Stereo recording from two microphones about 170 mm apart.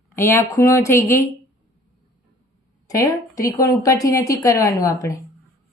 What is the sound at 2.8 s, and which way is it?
Speech, 20° left (ahead or behind).